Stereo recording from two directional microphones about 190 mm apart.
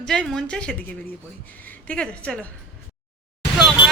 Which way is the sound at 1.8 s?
5° left (ahead or behind).